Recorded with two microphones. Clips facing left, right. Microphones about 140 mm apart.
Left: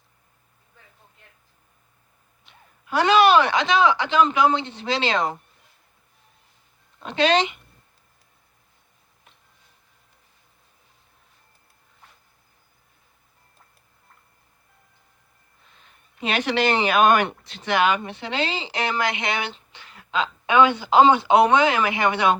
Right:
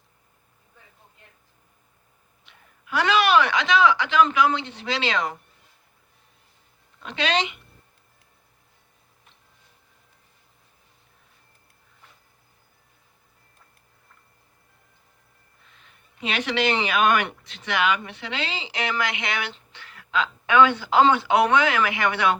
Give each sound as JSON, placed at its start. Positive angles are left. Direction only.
{"t": 2.8, "sound": "speech", "side_deg": 30}
{"t": 7.0, "sound": "speech", "side_deg": 40}
{"t": 16.2, "sound": "speech", "side_deg": 40}